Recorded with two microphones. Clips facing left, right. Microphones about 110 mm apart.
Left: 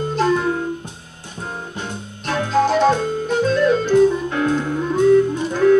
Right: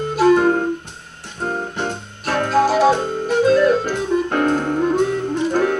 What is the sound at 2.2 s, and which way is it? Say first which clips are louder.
Music: right 1 dB; 55° right (ahead or behind).